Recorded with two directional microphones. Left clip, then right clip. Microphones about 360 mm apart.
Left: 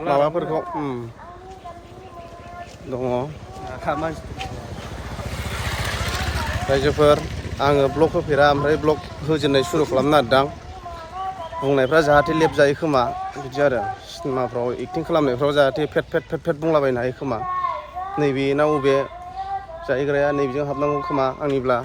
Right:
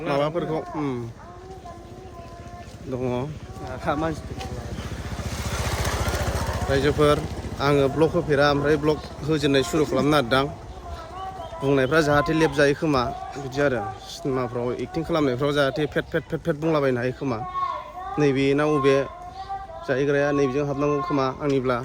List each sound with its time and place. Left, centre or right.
0.0 s speech: centre
2.9 s speech: centre
5.3 s vehicle: centre
6.7 s speech: centre
11.6 s speech: centre